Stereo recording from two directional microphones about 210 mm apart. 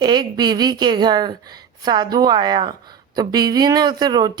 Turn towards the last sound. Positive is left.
turn(degrees=-20)  # may be behind; listen again after turning